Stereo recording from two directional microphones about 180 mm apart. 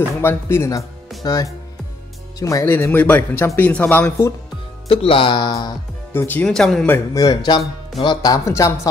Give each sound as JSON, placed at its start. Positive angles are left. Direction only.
{"t": 0.2, "sound": "speech", "side_deg": 15}
{"t": 4.8, "sound": "speech", "side_deg": 30}
{"t": 6.1, "sound": "speech", "side_deg": 10}
{"t": 6.9, "sound": "speech", "side_deg": 20}